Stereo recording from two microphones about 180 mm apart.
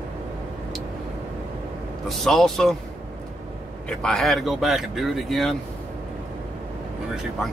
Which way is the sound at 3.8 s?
5° left (ahead or behind).